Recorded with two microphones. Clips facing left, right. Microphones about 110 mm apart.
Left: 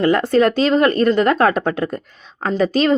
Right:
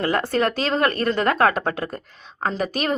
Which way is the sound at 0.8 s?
25° left (ahead or behind).